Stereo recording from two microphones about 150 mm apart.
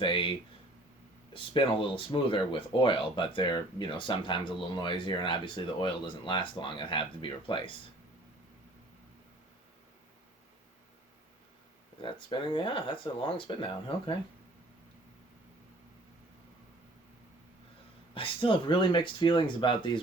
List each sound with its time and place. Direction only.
0.0 s speech: 35° left (ahead or behind)
12.0 s speech: 35° left (ahead or behind)
18.1 s speech: 35° left (ahead or behind)